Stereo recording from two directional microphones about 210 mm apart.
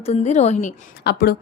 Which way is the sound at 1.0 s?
50° left (ahead or behind).